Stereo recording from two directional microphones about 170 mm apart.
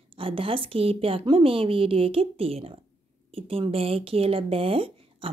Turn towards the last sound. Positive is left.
turn(degrees=-35)  # may be behind; listen again after turning